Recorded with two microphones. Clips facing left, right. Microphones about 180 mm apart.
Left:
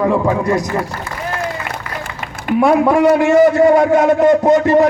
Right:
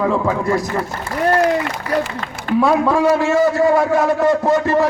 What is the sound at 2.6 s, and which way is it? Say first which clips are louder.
A man's voice: left 4 dB; 15° left (ahead or behind).